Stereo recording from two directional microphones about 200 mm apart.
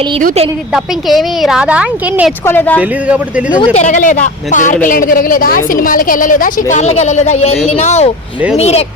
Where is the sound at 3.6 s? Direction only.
35° left (ahead or behind).